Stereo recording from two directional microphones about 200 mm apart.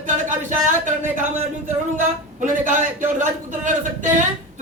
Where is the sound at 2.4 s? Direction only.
40° right (ahead or behind).